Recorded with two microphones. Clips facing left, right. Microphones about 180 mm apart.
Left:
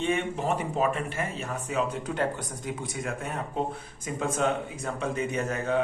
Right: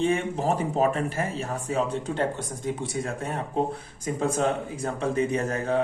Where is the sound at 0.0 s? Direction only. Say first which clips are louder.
Right 3 dB; 35° right (ahead or behind).